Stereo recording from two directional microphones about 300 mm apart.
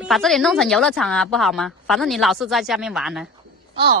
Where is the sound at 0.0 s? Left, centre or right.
Centre.